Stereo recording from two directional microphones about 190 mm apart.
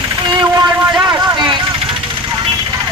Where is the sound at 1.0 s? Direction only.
25° right (ahead or behind).